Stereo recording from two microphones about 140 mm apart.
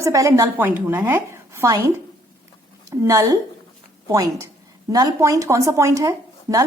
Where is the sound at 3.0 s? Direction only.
25° right (ahead or behind).